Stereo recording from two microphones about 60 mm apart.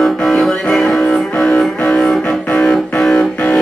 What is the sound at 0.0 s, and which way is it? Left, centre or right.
Music, centre.